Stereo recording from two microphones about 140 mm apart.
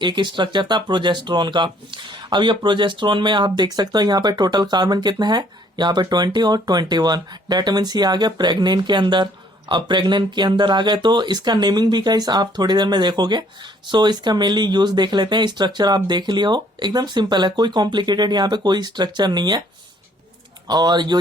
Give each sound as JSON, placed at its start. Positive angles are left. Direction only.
{"t": 0.0, "sound": "speech", "side_deg": -35}
{"t": 20.7, "sound": "speech", "side_deg": -30}